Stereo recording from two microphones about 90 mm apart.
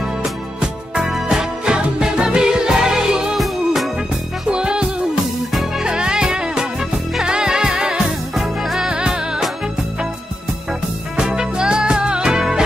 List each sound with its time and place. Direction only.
0.2 s music: 5° right (ahead or behind)
11.1 s music: 10° right (ahead or behind)